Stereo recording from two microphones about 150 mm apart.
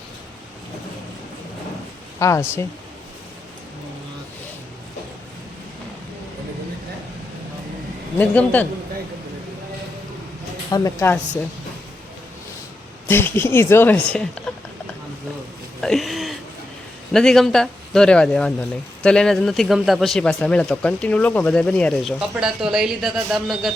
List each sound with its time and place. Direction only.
2.1 s speech: 20° left (ahead or behind)
8.2 s speech: 10° left (ahead or behind)
10.7 s speech: 25° left (ahead or behind)
13.1 s speech: 15° left (ahead or behind)
15.8 s a sound: centre (ahead or behind)
17.1 s speech: 5° left (ahead or behind)
22.4 s speech: 5° right (ahead or behind)